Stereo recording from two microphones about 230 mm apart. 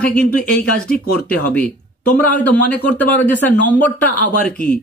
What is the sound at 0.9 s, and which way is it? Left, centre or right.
Speech, left.